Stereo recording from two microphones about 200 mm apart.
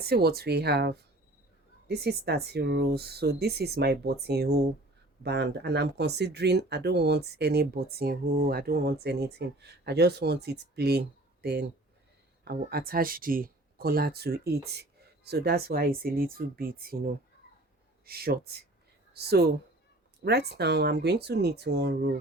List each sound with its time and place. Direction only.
0.0 s speech: 50° right (ahead or behind)
12.7 s speech: 45° right (ahead or behind)
18.0 s speech: 50° right (ahead or behind)